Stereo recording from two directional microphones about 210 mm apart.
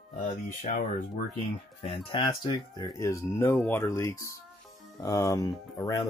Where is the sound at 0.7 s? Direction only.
50° left (ahead or behind).